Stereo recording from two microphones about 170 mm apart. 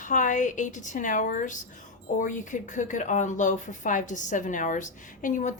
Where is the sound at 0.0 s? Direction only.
50° left (ahead or behind).